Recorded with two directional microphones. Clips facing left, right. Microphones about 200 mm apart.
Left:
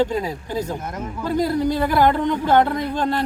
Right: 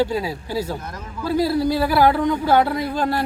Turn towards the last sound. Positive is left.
turn(degrees=-10)  # may be behind; listen again after turning